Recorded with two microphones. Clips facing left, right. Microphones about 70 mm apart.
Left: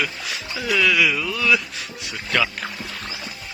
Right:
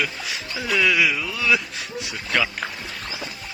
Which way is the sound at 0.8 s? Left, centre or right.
Centre.